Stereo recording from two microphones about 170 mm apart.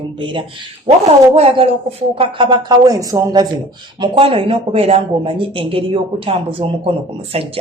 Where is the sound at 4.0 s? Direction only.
30° right (ahead or behind).